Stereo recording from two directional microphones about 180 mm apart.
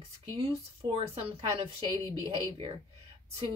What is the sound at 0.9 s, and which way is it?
Speech, 30° right (ahead or behind).